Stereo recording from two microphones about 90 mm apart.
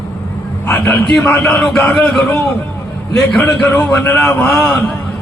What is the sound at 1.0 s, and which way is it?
Speech, 15° left (ahead or behind).